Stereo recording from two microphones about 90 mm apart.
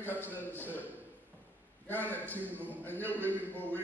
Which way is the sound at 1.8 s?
20° left (ahead or behind).